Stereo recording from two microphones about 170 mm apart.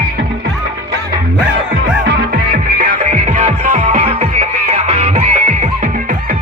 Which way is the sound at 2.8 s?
45° right (ahead or behind).